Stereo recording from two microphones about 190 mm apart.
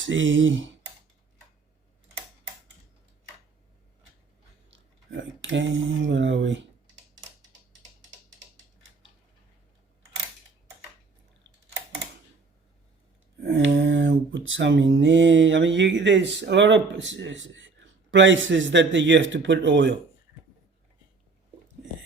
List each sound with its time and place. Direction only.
0.0 s speech: 85° right
4.7 s speech: 80° right
13.4 s a sound: 65° right (ahead or behind)